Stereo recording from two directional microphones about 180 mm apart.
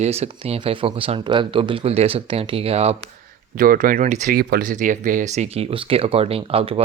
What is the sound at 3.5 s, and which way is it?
Speech, 50° right (ahead or behind).